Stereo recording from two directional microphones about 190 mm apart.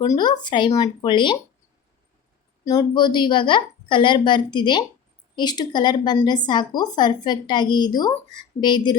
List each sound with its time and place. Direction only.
0.0 s speech: 20° left (ahead or behind)
2.6 s speech: 20° left (ahead or behind)